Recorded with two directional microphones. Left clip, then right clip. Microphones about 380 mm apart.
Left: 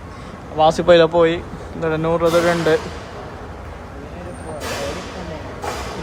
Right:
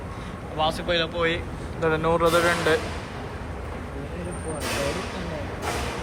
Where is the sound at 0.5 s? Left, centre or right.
Centre.